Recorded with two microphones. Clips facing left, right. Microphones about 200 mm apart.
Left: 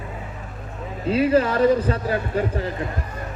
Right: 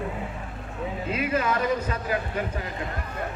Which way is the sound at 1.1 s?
30° left (ahead or behind).